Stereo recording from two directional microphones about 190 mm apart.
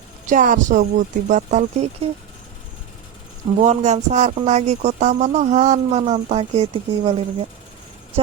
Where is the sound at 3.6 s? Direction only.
35° right (ahead or behind).